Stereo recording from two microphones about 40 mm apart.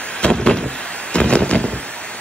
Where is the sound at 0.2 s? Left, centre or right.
Centre.